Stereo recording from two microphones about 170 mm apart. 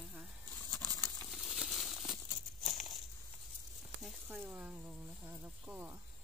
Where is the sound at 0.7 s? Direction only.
5° left (ahead or behind).